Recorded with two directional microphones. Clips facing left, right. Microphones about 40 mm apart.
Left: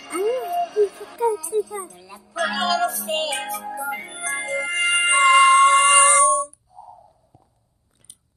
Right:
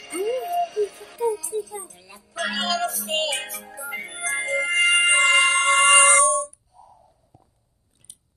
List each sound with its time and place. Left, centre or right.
0.0 s jingle bell: centre
1.4 s music: centre
5.9 s music: centre
6.1 s a sound: centre